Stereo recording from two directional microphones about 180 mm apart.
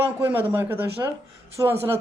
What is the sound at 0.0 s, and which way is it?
A man's voice, 10° right (ahead or behind).